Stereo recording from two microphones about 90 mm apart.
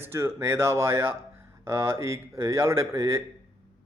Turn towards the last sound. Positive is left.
turn(degrees=-30)  # may be behind; listen again after turning